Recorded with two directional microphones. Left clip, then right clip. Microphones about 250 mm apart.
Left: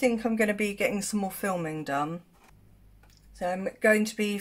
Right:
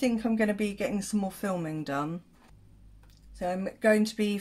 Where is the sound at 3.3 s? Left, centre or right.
Centre.